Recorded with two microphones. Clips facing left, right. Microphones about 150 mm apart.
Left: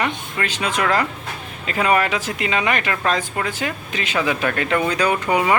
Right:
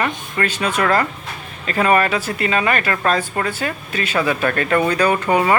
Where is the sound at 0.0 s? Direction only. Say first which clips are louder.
Right 2 dB; 15° left (ahead or behind).